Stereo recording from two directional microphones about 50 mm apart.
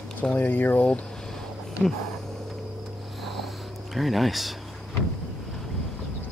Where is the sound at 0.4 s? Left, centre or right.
Left.